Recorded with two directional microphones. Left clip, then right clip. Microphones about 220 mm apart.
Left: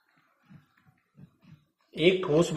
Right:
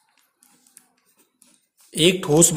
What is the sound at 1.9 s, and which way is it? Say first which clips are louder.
Speech: right 6 dB; 40° right (ahead or behind).